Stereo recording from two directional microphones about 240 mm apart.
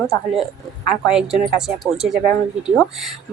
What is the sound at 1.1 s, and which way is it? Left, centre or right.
Speech, centre.